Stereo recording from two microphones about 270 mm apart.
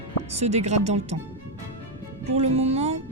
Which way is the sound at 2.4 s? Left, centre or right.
Right.